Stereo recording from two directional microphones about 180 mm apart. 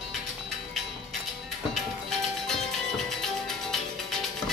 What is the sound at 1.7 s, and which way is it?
Music, centre (ahead or behind).